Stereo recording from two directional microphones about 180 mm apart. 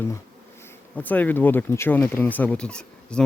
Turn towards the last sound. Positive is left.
turn(degrees=5)  # may be behind; listen again after turning